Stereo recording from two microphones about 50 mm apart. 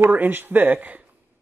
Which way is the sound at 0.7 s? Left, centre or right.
Right.